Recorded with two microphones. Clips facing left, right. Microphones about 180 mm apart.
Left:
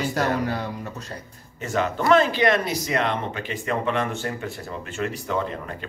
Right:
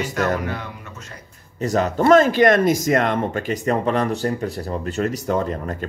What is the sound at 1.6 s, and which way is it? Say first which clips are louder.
Speech: right 6 dB; 40° right (ahead or behind).